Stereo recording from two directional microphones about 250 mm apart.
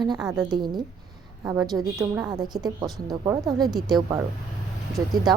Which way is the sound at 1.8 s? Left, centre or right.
Centre.